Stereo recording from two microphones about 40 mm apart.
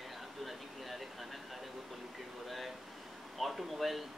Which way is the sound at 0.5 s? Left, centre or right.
Centre.